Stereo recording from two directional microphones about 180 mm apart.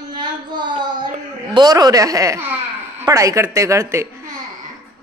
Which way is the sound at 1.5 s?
25° right (ahead or behind).